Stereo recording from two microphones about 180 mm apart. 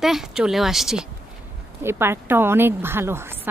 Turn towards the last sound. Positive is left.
turn(degrees=-15)  # may be behind; listen again after turning